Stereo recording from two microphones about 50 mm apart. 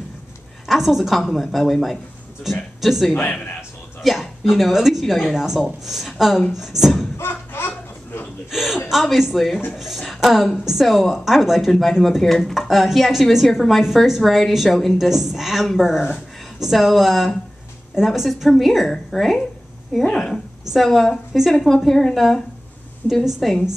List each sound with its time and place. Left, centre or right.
0.7 s a woman's voice: centre
7.2 s a sound: left
8.5 s speech: centre
15.0 s speech: centre